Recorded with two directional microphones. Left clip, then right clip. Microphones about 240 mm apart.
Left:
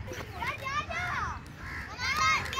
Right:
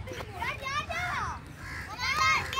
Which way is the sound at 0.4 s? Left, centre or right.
Right.